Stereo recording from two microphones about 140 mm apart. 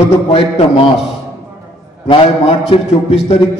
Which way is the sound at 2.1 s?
40° left (ahead or behind).